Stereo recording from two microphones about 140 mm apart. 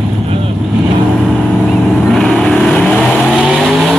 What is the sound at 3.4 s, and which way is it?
Vehicle, 5° right (ahead or behind).